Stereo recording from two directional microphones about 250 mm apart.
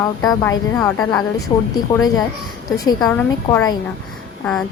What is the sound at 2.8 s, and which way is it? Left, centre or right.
Speech, centre.